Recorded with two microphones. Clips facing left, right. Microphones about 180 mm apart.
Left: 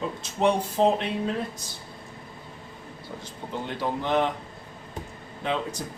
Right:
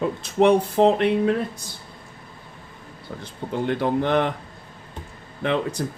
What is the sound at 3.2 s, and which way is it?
Speech, 60° right (ahead or behind).